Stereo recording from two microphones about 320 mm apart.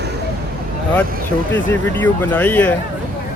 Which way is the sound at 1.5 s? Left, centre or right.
Centre.